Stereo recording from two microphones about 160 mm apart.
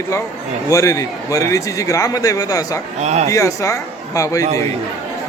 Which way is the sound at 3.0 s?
45° right (ahead or behind).